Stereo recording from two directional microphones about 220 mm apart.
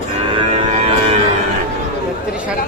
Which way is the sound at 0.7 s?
30° right (ahead or behind).